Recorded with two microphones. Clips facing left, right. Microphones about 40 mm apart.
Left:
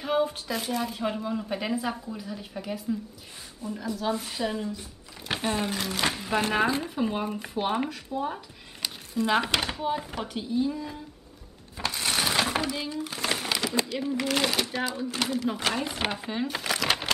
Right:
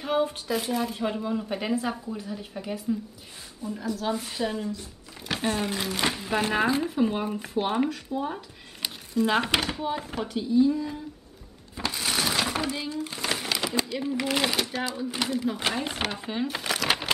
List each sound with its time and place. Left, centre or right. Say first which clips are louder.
0.0 s speech: even; centre
5.3 s speech: right 1 dB; centre
5.9 s speech: right 1 dB; centre
11.8 s a sound: even; centre
13.6 s speech: even; centre
16.0 s speech: left 1 dB; centre
16.3 s a sound: even; centre